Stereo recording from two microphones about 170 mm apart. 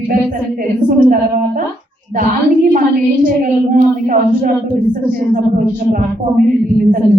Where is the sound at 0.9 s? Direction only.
55° right (ahead or behind).